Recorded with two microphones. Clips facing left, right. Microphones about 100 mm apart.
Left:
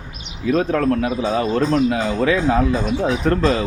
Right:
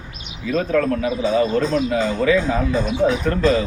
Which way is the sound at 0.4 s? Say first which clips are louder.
Left 2 dB; 40° left (ahead or behind).